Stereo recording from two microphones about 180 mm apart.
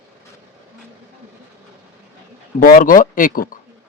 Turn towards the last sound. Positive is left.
turn(degrees=50)  # may be behind; listen again after turning